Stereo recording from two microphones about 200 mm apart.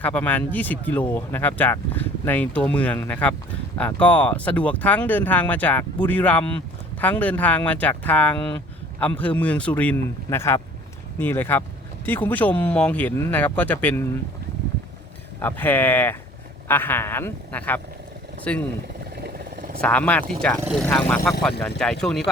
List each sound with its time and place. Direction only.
0.0 s speech: 10° left (ahead or behind)
15.4 s speech: 10° left (ahead or behind)
19.1 s vehicle: 55° right (ahead or behind)
19.8 s speech: 5° left (ahead or behind)